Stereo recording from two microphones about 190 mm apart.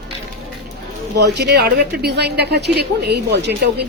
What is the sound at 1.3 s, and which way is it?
A woman's voice, 60° right (ahead or behind).